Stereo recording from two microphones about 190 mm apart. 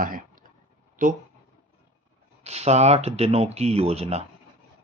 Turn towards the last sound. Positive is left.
turn(degrees=-35)  # may be behind; listen again after turning